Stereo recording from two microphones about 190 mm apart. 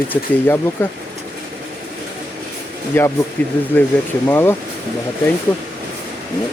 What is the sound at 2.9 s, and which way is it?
Speech, 10° left (ahead or behind).